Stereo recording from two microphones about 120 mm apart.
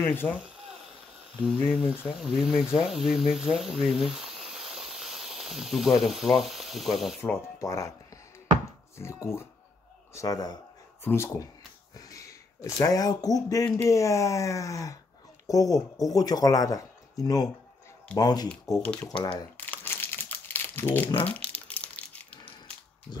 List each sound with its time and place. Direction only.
0.1 s speech: 15° left (ahead or behind)
1.8 s speech: 5° right (ahead or behind)
2.8 s a sound: centre (ahead or behind)
6.0 s speech: centre (ahead or behind)
7.2 s speech: 20° left (ahead or behind)
8.9 s a man's voice: 20° left (ahead or behind)
11.1 s a man's voice: 20° left (ahead or behind)
18.5 s speech: 10° left (ahead or behind)
19.5 s crumpling: 15° left (ahead or behind)